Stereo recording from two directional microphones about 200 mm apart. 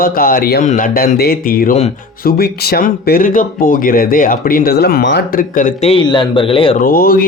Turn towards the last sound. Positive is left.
turn(degrees=45)  # may be behind; listen again after turning